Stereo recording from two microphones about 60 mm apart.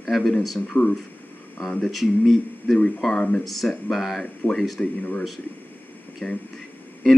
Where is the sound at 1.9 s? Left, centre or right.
Centre.